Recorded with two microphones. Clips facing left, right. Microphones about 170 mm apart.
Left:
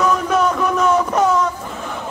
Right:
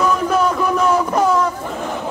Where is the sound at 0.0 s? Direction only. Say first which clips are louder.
Even; centre (ahead or behind).